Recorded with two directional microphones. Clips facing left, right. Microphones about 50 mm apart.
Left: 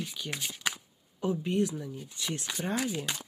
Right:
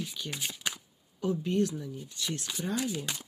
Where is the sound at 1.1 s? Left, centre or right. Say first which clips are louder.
Even; centre.